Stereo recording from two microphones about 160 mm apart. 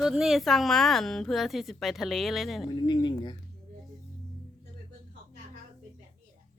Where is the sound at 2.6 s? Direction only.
25° left (ahead or behind).